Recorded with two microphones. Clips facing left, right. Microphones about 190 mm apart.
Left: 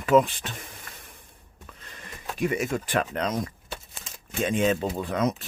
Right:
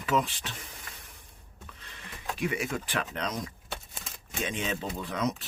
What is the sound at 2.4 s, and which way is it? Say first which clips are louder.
Speech: left 6 dB; 45° left (ahead or behind).